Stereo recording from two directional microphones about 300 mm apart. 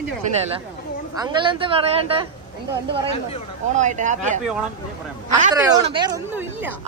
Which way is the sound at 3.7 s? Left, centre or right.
Right.